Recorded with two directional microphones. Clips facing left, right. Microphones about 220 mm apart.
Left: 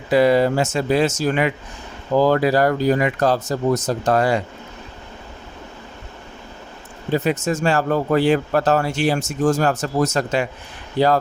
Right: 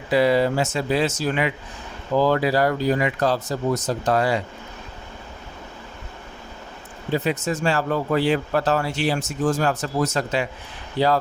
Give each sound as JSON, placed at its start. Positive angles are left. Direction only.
{"t": 0.1, "sound": "speech", "side_deg": 50}
{"t": 7.1, "sound": "speech", "side_deg": 45}